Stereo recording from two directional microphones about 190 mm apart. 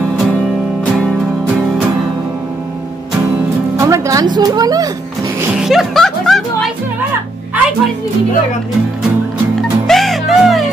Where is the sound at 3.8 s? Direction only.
15° right (ahead or behind).